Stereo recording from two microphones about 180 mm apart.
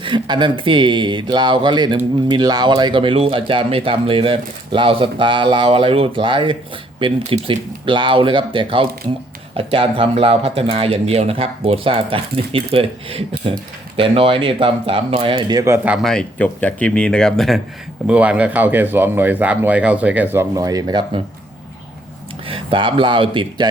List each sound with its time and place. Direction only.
0.0 s speech: 25° right (ahead or behind)
22.4 s speech: 30° right (ahead or behind)